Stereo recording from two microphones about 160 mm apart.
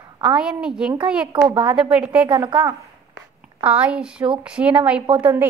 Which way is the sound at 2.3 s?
30° right (ahead or behind).